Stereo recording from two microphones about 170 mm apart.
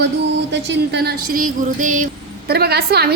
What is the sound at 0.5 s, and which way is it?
A woman's voice, 80° right.